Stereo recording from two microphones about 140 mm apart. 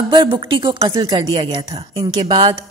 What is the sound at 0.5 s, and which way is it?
Speech, 40° right (ahead or behind).